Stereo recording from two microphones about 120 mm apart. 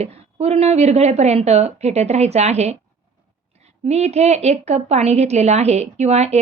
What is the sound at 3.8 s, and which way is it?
A woman's voice, 65° right (ahead or behind).